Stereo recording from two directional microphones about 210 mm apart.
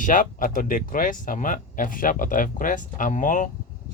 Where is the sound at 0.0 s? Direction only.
40° left (ahead or behind).